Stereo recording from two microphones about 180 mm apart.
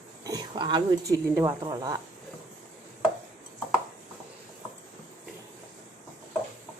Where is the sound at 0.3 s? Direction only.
25° right (ahead or behind).